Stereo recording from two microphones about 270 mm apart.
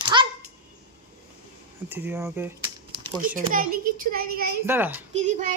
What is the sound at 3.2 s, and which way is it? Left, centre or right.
Speech, right.